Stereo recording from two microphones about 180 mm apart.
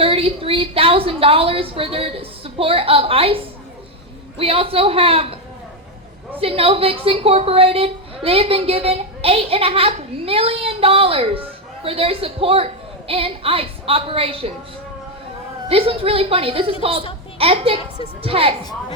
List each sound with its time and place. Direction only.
0.0 s a woman's voice: 30° right (ahead or behind)
6.4 s a woman's voice: 30° right (ahead or behind)
15.7 s a woman's voice: 30° right (ahead or behind)